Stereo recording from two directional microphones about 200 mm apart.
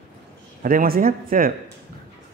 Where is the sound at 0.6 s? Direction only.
45° right (ahead or behind).